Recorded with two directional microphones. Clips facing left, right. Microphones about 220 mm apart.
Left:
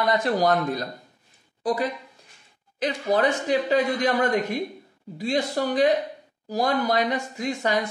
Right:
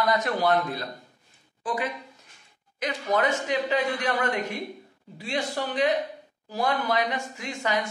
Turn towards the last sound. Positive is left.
turn(degrees=40)  # may be behind; listen again after turning